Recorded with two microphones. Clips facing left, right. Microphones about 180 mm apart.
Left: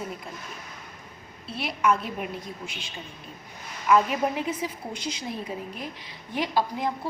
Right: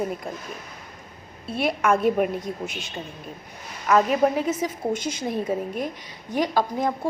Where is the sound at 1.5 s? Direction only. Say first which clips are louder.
Right 4 dB; 50° right (ahead or behind).